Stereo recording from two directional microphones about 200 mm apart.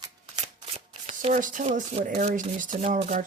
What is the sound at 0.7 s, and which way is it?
Shuffling cards, 35° right (ahead or behind).